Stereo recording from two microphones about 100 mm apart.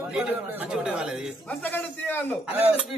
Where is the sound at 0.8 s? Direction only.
10° right (ahead or behind).